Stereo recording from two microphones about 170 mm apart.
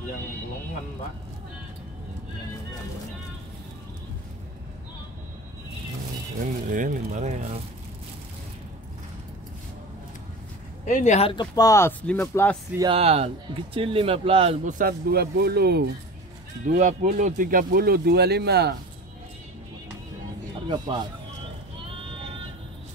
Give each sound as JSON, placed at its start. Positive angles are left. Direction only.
{"t": 6.4, "sound": "a sound", "side_deg": -50}
{"t": 10.9, "sound": "speech", "side_deg": 45}
{"t": 11.2, "sound": "speech", "side_deg": 25}
{"t": 12.9, "sound": "speech", "side_deg": -35}
{"t": 14.6, "sound": "speech", "side_deg": -50}
{"t": 16.6, "sound": "speech", "side_deg": -45}
{"t": 20.6, "sound": "speech", "side_deg": -25}